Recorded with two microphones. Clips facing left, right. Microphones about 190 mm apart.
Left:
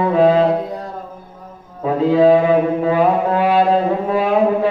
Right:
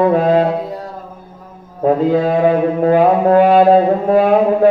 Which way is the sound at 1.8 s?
45° right (ahead or behind).